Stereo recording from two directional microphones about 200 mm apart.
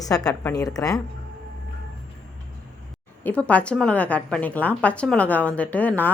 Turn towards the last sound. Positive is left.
turn(degrees=10)  # may be behind; listen again after turning